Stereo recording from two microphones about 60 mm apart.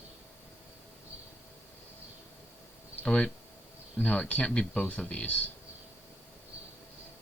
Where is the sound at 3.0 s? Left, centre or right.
Left.